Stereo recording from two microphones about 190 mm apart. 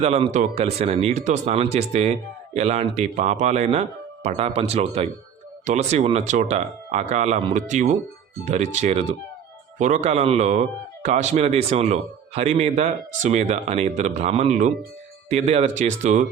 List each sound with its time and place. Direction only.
0.0 s speech: 35° right (ahead or behind)